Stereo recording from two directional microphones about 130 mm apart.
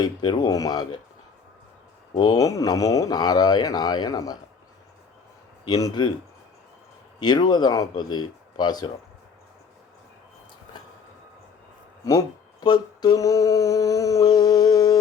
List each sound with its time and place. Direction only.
0.0 s speech: 35° left (ahead or behind)
2.1 s speech: 30° left (ahead or behind)
5.6 s speech: 30° left (ahead or behind)
7.2 s speech: 35° left (ahead or behind)
12.0 s speech: 30° left (ahead or behind)